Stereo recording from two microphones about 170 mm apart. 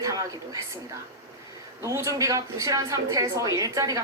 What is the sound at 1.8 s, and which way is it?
A woman's voice, 20° right (ahead or behind).